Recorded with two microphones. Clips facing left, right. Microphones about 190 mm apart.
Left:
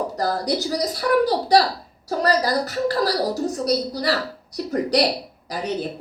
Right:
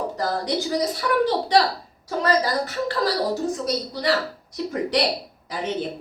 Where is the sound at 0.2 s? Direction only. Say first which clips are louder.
Left 2 dB; 35° left (ahead or behind).